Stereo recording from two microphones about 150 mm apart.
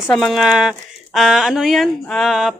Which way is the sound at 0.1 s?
Centre (ahead or behind).